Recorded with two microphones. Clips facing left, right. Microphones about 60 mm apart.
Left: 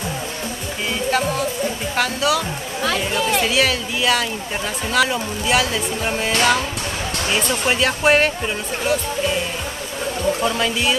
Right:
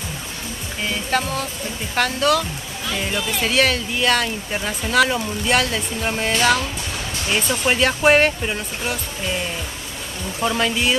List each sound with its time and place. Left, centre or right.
1.1 s speech: centre
2.8 s speech: left
3.4 s speech: centre
10.4 s speech: centre